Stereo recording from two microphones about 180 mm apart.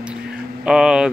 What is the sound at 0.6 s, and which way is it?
Speech, 5° right (ahead or behind).